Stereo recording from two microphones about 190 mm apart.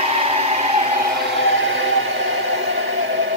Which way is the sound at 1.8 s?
80° right.